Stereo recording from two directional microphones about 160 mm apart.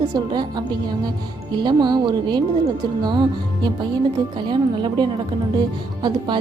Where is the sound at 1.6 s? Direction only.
25° right (ahead or behind).